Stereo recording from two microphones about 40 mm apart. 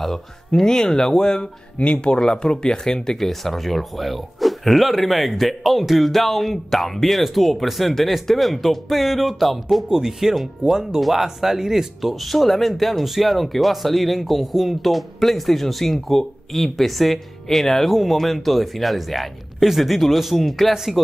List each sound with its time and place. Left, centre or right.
0.7 s speech: centre
3.2 s speech: centre
20.7 s speech: centre